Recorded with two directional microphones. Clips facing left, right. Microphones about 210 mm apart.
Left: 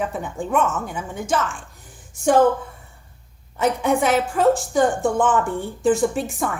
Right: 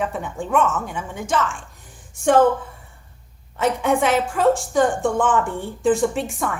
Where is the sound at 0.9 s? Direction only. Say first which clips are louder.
Even; 40° left (ahead or behind).